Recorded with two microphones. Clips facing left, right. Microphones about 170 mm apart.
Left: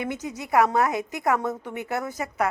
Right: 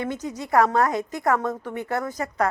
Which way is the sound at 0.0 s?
15° left (ahead or behind).